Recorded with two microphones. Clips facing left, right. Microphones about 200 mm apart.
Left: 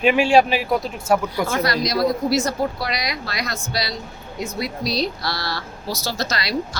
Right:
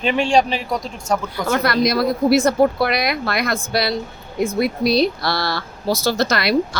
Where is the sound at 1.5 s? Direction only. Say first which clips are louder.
Right 6 dB; 55° right (ahead or behind).